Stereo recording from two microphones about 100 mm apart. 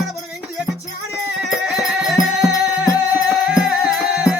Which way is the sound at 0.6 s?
5° right (ahead or behind).